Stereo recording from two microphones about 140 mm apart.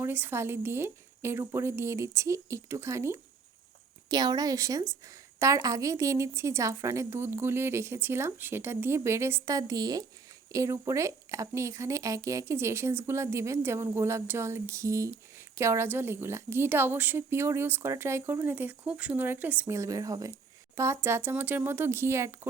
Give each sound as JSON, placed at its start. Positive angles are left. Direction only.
{"t": 0.0, "sound": "a woman's voice", "side_deg": -15}